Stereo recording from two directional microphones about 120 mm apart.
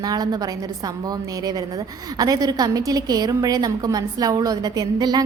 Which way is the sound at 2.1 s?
30° right (ahead or behind).